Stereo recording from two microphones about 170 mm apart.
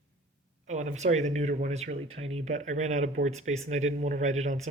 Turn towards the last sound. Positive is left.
turn(degrees=-40)  # may be behind; listen again after turning